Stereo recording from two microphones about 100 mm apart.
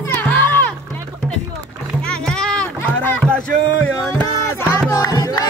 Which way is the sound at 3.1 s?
10° left (ahead or behind).